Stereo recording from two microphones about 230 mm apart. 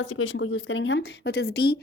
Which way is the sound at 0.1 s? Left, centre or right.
Left.